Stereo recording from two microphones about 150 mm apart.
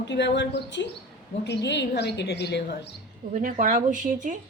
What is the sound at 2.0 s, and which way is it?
Speech, 90° left.